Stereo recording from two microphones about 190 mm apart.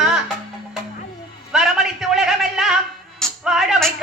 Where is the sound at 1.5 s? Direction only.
Centre (ahead or behind).